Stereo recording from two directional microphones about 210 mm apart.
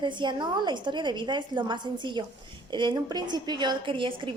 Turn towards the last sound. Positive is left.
turn(degrees=-25)  # may be behind; listen again after turning